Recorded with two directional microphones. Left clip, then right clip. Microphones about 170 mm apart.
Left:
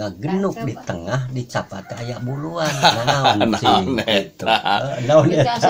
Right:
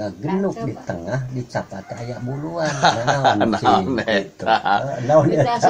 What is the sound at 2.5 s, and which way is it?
A man's voice, centre (ahead or behind).